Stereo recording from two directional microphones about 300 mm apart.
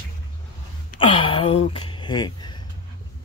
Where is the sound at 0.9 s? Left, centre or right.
Centre.